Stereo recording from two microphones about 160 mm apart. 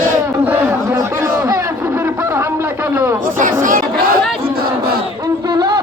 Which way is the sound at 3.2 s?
55° right (ahead or behind).